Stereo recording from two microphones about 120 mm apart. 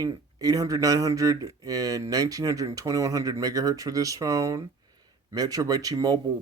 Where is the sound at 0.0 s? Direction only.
30° right (ahead or behind).